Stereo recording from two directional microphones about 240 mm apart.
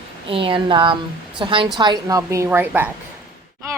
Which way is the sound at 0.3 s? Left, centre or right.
Right.